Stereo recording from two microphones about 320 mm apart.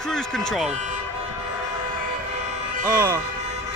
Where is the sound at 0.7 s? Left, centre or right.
Right.